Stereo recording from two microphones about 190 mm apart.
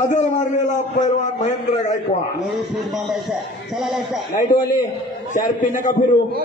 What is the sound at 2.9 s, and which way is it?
A man's voice, centre (ahead or behind).